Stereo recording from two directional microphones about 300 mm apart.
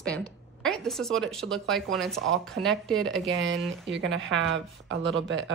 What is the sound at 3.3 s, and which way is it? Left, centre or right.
Speech, right.